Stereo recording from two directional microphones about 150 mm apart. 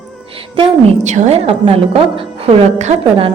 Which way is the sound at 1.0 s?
50° right (ahead or behind).